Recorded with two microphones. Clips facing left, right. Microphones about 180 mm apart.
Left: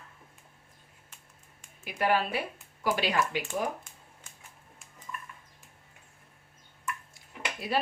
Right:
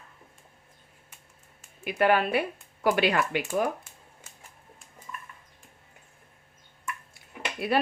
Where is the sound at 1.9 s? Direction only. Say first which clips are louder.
Right 4 dB; 60° right (ahead or behind).